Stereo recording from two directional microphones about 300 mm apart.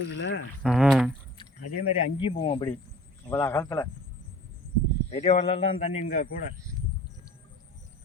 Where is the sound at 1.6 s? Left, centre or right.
Left.